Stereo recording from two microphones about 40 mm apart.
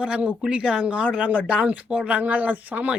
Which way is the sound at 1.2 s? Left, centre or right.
Right.